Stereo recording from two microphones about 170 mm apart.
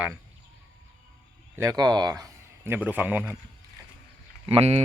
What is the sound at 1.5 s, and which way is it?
A man's voice, 20° right (ahead or behind).